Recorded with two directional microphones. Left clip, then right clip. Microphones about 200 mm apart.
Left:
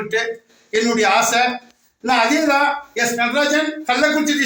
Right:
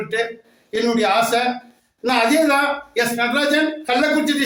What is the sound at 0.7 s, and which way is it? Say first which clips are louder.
Speech: left 2 dB; 15° right (ahead or behind).